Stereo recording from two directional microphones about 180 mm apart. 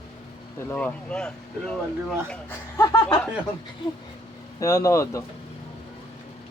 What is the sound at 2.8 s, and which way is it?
Speech, 20° left (ahead or behind).